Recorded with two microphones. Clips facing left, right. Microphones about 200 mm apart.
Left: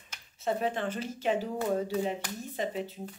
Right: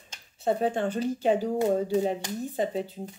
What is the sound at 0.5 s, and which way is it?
Speech, 30° right (ahead or behind).